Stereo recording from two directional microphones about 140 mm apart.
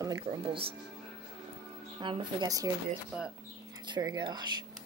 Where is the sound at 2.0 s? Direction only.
35° right (ahead or behind).